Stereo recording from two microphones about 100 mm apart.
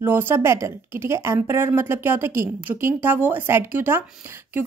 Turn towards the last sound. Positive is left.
turn(degrees=-20)  # may be behind; listen again after turning